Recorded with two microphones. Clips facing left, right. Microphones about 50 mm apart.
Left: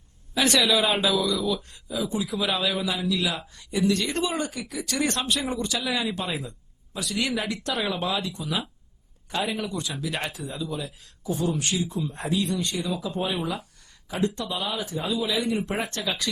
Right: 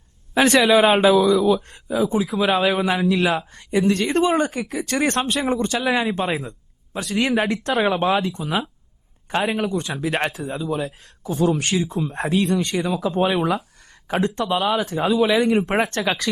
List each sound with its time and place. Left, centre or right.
0.3 s speech: right
10.7 s speech: right
14.1 s speech: right
14.4 s speech: right